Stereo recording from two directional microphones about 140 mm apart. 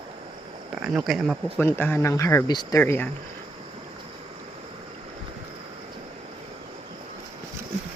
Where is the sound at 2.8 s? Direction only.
15° left (ahead or behind).